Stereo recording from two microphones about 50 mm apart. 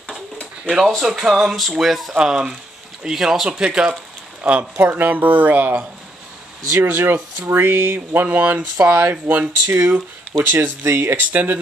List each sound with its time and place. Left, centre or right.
0.7 s speech: centre
2.1 s speech: centre
3.4 s speech: centre
4.4 s speech: right
6.8 s speech: right
9.8 s speech: right
10.4 s speech: right
10.9 s speech: right
11.1 s speech: right